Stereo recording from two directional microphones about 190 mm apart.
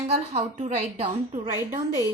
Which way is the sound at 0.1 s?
35° right (ahead or behind).